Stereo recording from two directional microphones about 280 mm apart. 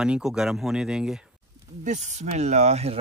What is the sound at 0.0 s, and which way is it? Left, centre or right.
Speech, centre.